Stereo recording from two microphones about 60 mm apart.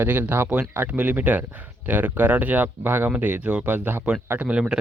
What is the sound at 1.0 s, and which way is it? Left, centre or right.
Speech, right.